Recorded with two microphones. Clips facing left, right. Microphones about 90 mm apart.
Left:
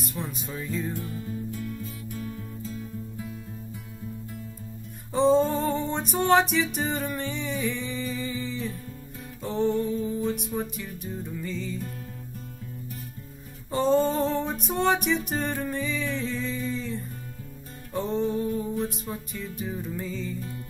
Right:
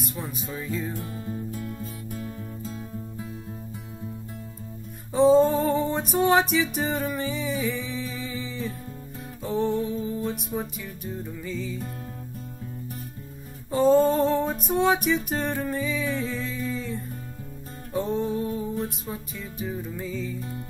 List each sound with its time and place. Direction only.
0.2 s music: centre (ahead or behind)
0.9 s music: 40° right (ahead or behind)
5.1 s music: centre (ahead or behind)
13.7 s music: centre (ahead or behind)